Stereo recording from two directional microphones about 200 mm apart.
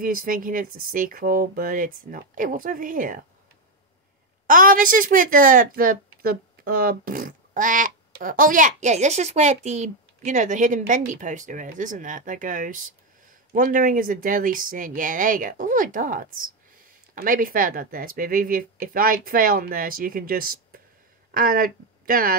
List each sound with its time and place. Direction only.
0.0 s a woman's voice: 45° right (ahead or behind)
4.5 s a woman's voice: 45° right (ahead or behind)